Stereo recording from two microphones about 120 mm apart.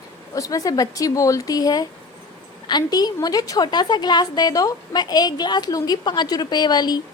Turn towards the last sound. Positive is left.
turn(degrees=35)  # may be behind; listen again after turning